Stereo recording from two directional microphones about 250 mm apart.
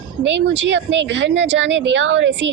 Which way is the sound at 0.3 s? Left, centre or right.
Right.